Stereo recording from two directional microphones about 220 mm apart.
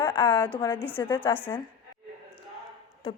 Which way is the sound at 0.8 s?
5° left (ahead or behind).